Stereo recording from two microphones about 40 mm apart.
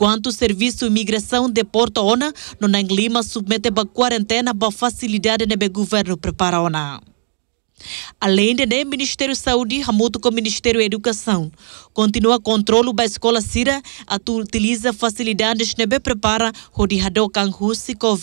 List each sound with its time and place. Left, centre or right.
0.0 s speech: left